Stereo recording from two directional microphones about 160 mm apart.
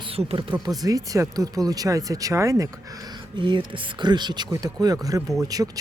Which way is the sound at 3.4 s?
30° right (ahead or behind).